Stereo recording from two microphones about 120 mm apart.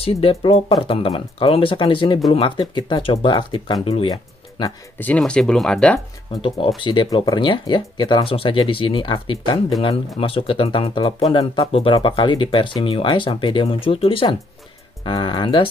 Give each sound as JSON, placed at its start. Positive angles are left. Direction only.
{"t": 0.0, "sound": "speech", "side_deg": 50}
{"t": 4.1, "sound": "music", "side_deg": 35}
{"t": 4.9, "sound": "speech", "side_deg": 10}
{"t": 6.8, "sound": "speech", "side_deg": 45}